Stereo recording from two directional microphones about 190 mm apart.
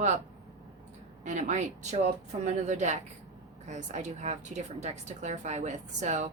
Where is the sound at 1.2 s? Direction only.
40° right (ahead or behind).